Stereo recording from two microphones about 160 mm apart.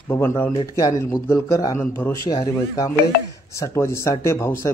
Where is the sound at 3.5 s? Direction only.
20° left (ahead or behind).